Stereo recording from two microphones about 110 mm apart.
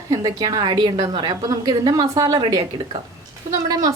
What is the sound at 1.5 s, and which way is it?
A woman's voice, 35° right (ahead or behind).